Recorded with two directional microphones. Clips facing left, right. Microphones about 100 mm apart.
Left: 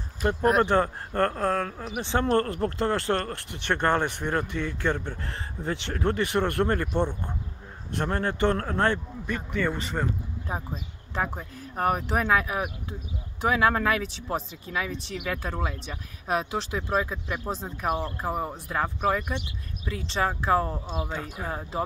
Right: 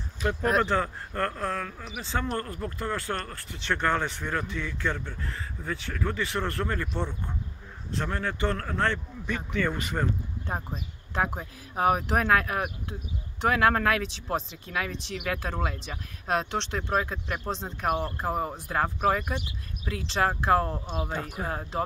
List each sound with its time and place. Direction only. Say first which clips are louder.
0.7 s speech: left 5 dB; 35° left (ahead or behind)
2.0 s speech: left 7 dB; 70° left (ahead or behind)
2.9 s speech: left 6 dB; 40° left (ahead or behind)
3.4 s speech: left 1 dB; 60° left (ahead or behind)
5.7 s speech: left 3 dB; 70° left (ahead or behind)
6.1 s speech: left 7 dB; 60° left (ahead or behind)
8.5 s speech: left 3 dB; 25° left (ahead or behind)
9.2 s speech: right 1 dB; 5° left (ahead or behind)
9.8 s speech: even; 5° right (ahead or behind)
21.1 s speech: right 1 dB; 5° right (ahead or behind)